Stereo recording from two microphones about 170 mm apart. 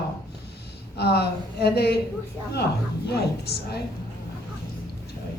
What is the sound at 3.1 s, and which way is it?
Speech, 75° left (ahead or behind).